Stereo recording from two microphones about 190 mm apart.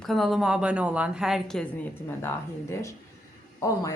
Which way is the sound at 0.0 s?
Centre (ahead or behind).